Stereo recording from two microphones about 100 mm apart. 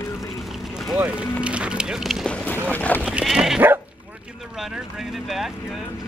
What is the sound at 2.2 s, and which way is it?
Boat, 10° left (ahead or behind).